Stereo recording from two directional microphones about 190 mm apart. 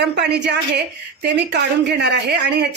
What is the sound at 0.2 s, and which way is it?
Speech, 65° right (ahead or behind).